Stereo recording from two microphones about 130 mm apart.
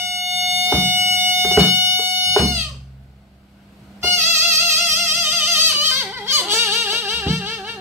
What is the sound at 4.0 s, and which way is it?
Music, 20° right (ahead or behind).